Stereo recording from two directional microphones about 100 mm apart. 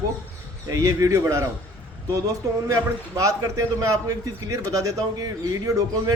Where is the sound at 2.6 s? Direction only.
35° right (ahead or behind).